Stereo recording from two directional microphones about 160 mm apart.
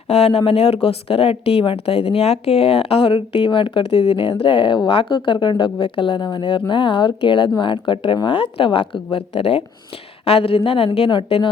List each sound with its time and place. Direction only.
0.1 s speech: 40° left (ahead or behind)